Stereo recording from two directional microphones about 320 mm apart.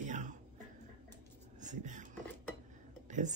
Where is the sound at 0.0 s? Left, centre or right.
Right.